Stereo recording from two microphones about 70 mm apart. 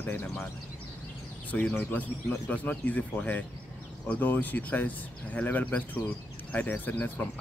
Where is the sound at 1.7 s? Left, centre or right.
Left.